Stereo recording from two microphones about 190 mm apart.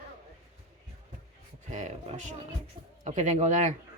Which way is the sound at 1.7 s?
40° right (ahead or behind).